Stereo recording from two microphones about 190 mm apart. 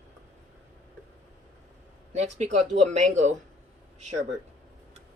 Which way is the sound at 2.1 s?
35° right (ahead or behind).